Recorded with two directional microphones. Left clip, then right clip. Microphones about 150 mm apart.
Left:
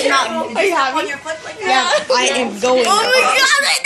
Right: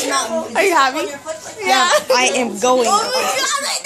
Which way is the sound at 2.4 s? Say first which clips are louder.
Even; 20° right (ahead or behind).